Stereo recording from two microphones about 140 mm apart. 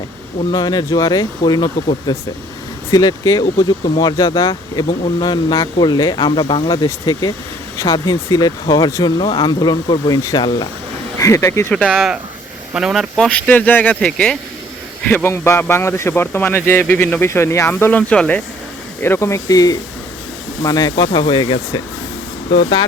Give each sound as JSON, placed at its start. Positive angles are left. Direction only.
{"t": 0.5, "sound": "speech", "side_deg": 30}
{"t": 11.2, "sound": "speech", "side_deg": 20}
{"t": 11.9, "sound": "speech", "side_deg": -5}
{"t": 19.0, "sound": "speech", "side_deg": 20}